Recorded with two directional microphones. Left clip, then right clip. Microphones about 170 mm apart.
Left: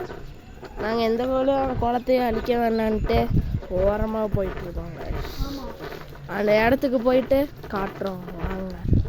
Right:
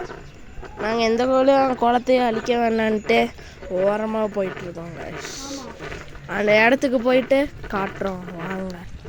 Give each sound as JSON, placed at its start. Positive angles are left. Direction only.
{"t": 0.8, "sound": "speech", "side_deg": -5}
{"t": 1.3, "sound": "speech", "side_deg": -30}
{"t": 8.3, "sound": "a sound", "side_deg": -5}